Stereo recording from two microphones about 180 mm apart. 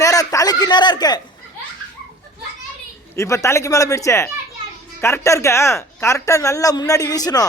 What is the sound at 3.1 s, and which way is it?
Speech, 15° left (ahead or behind).